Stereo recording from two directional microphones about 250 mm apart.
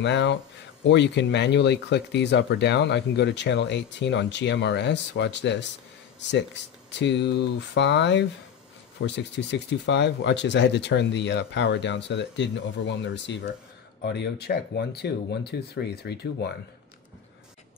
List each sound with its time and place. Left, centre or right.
0.0 s speech: left